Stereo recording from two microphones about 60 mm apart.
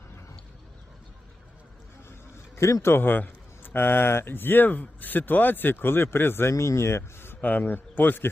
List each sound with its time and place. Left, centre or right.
2.6 s a man's voice: left
2.9 s a man's voice: left
6.5 s speech: left
7.4 s a man's voice: left